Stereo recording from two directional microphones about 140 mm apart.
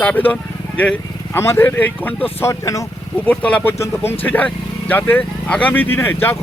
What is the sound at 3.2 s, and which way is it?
Speech, 10° left (ahead or behind).